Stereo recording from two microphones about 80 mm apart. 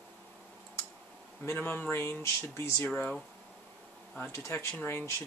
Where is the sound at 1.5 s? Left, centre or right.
Left.